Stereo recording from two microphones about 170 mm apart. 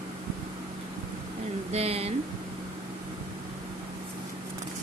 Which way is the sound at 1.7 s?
35° right (ahead or behind).